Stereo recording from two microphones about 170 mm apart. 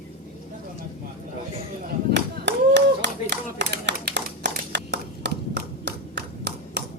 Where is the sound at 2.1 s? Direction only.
85° right.